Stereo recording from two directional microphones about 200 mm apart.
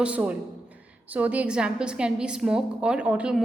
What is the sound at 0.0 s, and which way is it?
A woman's voice, 5° right (ahead or behind).